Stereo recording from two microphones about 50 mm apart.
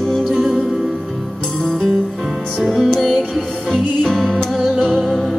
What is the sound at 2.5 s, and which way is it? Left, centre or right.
Music, centre.